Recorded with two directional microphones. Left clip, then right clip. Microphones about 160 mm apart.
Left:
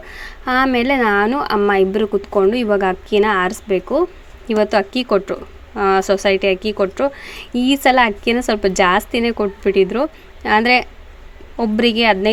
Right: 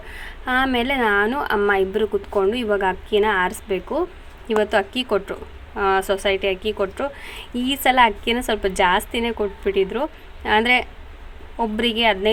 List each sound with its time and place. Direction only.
0.2 s a woman's voice: 40° left (ahead or behind)